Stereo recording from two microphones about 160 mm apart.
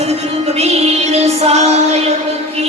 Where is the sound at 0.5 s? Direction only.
40° right (ahead or behind).